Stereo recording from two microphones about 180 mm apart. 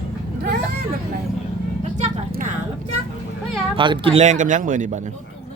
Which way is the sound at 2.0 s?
40° right (ahead or behind).